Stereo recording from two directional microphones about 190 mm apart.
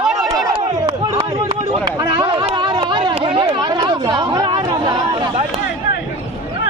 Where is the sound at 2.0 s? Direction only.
25° right (ahead or behind).